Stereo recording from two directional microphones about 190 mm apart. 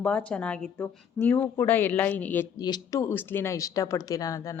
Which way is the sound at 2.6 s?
20° left (ahead or behind).